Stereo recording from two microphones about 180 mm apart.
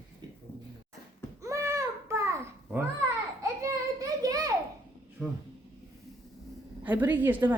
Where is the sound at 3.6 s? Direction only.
20° right (ahead or behind).